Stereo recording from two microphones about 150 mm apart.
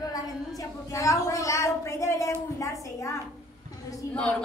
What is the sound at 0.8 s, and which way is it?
A woman's voice, 20° left (ahead or behind).